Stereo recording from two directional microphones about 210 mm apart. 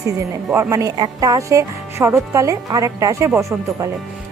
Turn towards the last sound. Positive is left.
turn(degrees=-15)  # may be behind; listen again after turning